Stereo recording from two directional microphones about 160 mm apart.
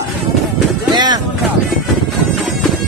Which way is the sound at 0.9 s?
25° right (ahead or behind).